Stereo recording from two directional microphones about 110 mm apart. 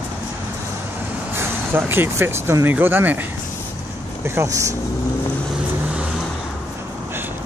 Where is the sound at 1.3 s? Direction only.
20° right (ahead or behind).